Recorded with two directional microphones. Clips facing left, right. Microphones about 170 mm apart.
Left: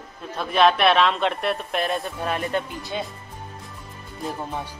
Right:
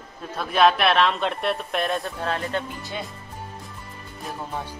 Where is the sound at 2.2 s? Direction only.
15° left (ahead or behind).